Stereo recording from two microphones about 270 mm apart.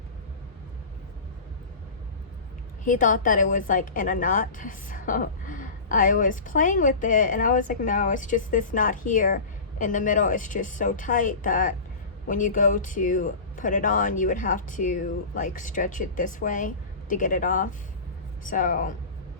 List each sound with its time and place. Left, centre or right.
2.8 s a woman's voice: left